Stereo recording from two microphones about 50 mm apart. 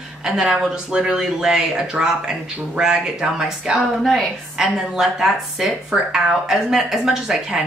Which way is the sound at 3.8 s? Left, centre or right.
Centre.